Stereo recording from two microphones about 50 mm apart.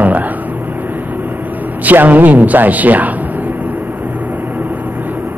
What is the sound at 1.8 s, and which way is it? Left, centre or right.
A man's voice, right.